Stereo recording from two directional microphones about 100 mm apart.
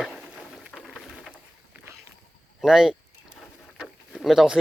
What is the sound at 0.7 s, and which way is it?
Rain, centre (ahead or behind).